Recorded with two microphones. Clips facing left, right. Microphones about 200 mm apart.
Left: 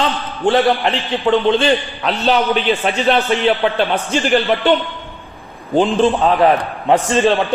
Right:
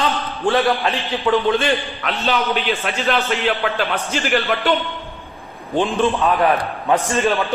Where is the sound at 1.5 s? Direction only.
30° left (ahead or behind).